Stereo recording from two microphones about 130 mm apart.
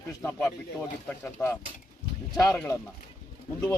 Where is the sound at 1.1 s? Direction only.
10° left (ahead or behind).